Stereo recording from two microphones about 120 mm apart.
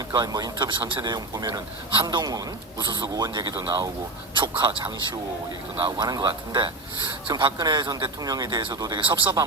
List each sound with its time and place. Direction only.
0.1 s speech: 35° right (ahead or behind)
5.8 s speech: 35° right (ahead or behind)